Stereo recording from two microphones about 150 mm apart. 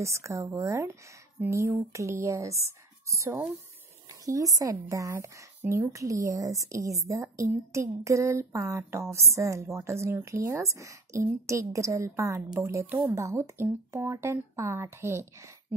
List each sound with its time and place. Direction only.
0.0 s a woman's voice: 20° right (ahead or behind)